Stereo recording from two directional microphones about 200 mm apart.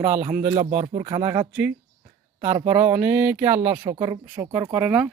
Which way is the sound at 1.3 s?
10° right (ahead or behind).